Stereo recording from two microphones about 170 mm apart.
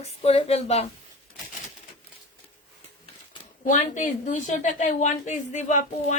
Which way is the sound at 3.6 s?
50° left (ahead or behind).